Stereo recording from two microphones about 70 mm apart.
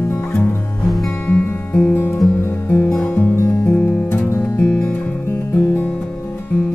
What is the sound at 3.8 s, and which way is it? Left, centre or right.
Music, left.